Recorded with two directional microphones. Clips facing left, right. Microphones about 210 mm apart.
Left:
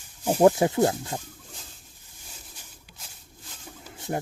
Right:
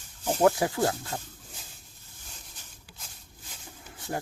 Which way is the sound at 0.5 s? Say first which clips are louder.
Left 5 dB; 20° left (ahead or behind).